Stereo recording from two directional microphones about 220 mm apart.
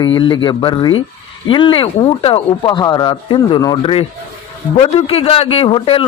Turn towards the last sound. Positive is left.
turn(degrees=25)  # may be behind; listen again after turning